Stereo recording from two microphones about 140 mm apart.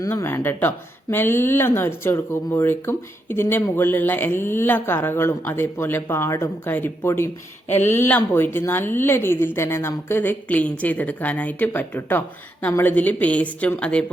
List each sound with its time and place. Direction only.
0.0 s speech: 20° left (ahead or behind)